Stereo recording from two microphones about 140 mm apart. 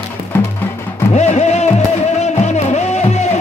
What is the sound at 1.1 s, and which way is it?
Music, 55° left (ahead or behind).